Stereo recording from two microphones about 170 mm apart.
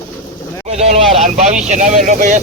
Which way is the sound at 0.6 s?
40° right (ahead or behind).